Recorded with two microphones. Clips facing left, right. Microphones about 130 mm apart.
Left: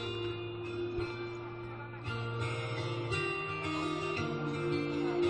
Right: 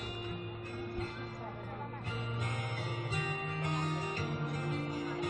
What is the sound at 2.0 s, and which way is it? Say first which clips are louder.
Music: left 4 dB; 45° right (ahead or behind).